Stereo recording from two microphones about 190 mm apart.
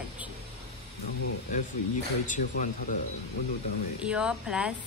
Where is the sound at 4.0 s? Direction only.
5° right (ahead or behind).